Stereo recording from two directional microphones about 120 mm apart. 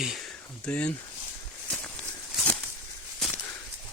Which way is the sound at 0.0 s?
Centre (ahead or behind).